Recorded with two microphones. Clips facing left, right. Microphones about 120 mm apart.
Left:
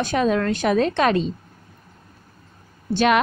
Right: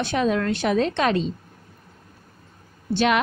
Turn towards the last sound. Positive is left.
turn(degrees=50)  # may be behind; listen again after turning